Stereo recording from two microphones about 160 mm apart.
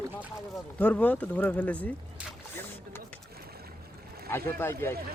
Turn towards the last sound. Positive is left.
turn(degrees=15)  # may be behind; listen again after turning